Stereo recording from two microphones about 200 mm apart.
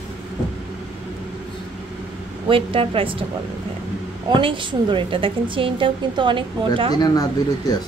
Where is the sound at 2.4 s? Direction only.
25° right (ahead or behind).